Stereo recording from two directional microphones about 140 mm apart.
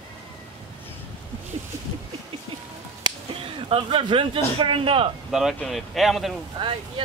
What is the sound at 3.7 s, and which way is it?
A man's voice, 35° right (ahead or behind).